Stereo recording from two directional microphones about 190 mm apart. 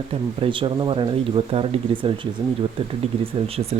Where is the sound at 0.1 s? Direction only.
30° right (ahead or behind).